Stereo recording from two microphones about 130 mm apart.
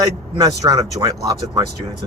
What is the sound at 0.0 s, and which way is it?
Speech, 30° right (ahead or behind).